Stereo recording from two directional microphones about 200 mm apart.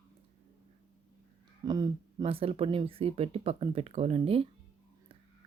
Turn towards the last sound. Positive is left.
turn(degrees=-30)  # may be behind; listen again after turning